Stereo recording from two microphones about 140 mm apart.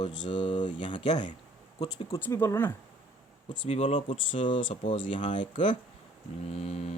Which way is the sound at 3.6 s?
45° left (ahead or behind).